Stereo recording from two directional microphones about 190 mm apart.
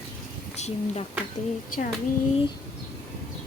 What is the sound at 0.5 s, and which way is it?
Speech, 35° left (ahead or behind).